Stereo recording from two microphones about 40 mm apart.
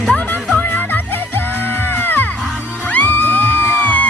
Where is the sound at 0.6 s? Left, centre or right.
Left.